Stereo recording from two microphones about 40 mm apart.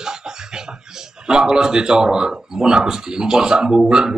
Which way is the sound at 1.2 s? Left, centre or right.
Centre.